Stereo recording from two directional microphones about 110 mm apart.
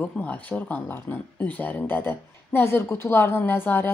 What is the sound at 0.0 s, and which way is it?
Speech, 15° left (ahead or behind).